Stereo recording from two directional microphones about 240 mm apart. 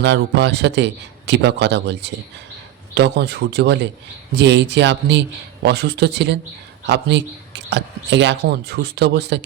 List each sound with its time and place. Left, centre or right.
0.0 s speech: right